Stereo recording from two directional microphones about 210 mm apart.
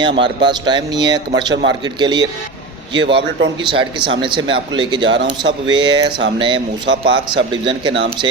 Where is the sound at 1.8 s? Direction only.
20° right (ahead or behind).